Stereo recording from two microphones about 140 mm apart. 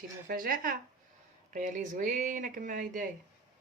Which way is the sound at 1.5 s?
70° right (ahead or behind).